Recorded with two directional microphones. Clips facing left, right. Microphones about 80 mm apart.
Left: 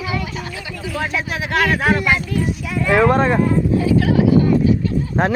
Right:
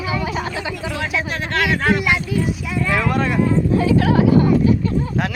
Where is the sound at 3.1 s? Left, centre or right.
Left.